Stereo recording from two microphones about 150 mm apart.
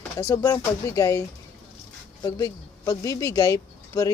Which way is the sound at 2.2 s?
25° left (ahead or behind).